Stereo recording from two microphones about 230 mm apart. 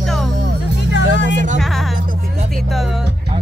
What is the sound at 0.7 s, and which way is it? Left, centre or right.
Music, left.